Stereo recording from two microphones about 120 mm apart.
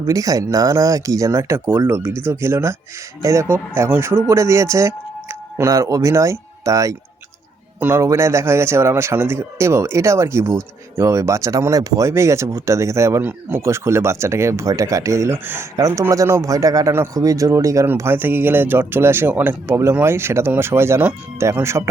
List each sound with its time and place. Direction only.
0.0 s a man's voice: 30° right (ahead or behind)